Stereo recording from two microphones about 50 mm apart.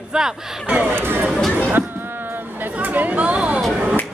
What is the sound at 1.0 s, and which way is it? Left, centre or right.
Speech, right.